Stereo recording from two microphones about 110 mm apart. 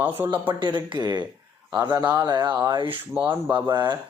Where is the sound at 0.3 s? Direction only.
45° right (ahead or behind).